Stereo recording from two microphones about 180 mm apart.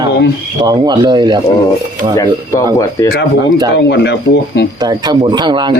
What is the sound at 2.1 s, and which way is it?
Speech, 15° left (ahead or behind).